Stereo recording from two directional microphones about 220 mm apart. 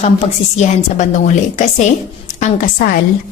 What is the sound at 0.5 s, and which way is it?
A woman's voice, 30° left (ahead or behind).